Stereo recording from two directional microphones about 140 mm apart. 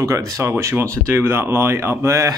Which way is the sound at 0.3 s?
20° right (ahead or behind).